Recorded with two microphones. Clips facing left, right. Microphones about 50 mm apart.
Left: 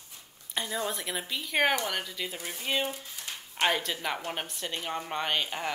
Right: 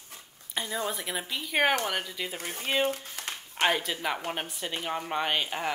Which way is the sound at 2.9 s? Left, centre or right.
Right.